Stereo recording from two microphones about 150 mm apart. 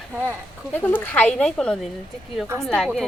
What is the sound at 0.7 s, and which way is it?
Speech, 10° left (ahead or behind).